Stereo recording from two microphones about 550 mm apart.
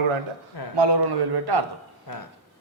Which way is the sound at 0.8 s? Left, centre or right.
Right.